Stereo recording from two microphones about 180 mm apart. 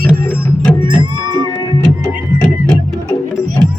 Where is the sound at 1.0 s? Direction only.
25° right (ahead or behind).